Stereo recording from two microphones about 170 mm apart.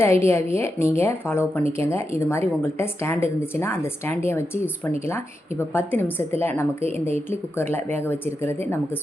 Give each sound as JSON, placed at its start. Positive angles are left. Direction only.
{"t": 0.0, "sound": "a woman's voice", "side_deg": 15}